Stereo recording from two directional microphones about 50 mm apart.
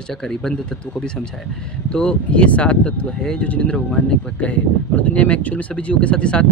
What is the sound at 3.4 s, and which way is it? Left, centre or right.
Speech, left.